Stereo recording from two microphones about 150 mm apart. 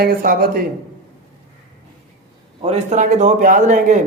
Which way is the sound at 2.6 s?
45° right (ahead or behind).